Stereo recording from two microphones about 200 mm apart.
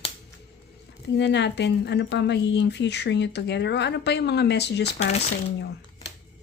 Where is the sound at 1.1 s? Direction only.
60° left (ahead or behind).